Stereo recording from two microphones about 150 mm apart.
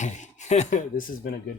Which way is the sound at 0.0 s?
50° left (ahead or behind).